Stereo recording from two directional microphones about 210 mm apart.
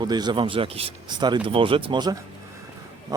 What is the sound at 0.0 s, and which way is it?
Speech, 20° right (ahead or behind).